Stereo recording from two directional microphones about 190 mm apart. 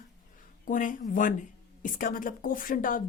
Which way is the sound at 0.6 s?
45° left (ahead or behind).